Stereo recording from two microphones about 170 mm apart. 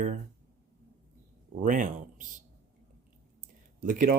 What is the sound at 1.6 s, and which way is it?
Speech, 50° right (ahead or behind).